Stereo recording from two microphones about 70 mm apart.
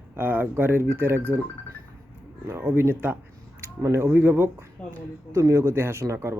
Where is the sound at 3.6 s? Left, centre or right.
Right.